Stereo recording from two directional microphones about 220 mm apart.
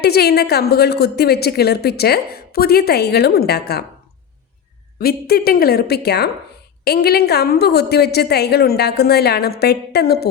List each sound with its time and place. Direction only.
0.0 s a woman's voice: 45° left (ahead or behind)
4.9 s a woman's voice: 45° left (ahead or behind)